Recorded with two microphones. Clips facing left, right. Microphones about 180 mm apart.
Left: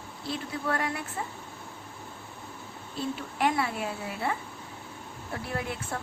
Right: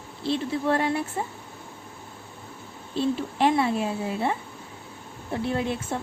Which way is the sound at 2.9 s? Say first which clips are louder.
Right 8 dB; 25° right (ahead or behind).